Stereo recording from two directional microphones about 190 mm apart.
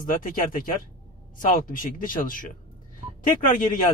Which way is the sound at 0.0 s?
45° left (ahead or behind).